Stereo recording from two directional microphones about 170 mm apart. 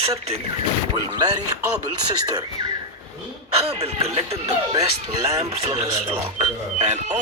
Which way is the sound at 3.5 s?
35° right (ahead or behind).